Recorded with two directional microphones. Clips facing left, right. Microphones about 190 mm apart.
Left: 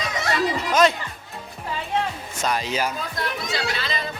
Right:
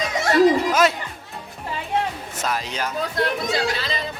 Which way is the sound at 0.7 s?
5° right (ahead or behind).